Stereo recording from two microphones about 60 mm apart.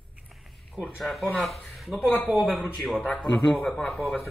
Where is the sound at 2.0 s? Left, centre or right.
Left.